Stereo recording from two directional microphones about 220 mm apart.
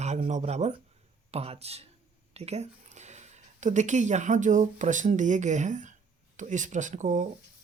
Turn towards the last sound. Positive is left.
turn(degrees=-35)  # may be behind; listen again after turning